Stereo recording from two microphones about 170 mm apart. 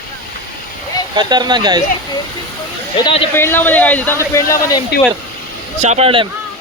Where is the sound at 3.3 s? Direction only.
15° left (ahead or behind).